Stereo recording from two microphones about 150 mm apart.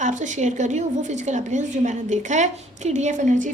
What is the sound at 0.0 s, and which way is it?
A woman's voice, 55° right (ahead or behind).